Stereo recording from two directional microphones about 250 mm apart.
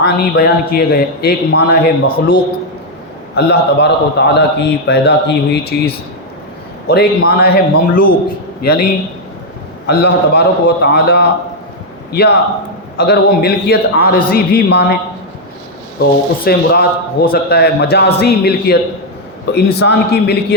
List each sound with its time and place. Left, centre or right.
0.0 s a man's voice: left
16.0 s a man's voice: left